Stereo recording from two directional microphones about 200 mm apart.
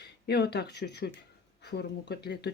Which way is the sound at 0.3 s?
55° left (ahead or behind).